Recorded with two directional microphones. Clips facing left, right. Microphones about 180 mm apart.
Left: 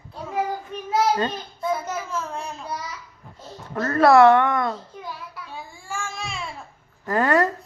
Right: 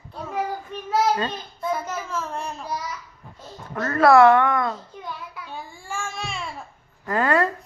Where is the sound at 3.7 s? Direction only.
25° left (ahead or behind).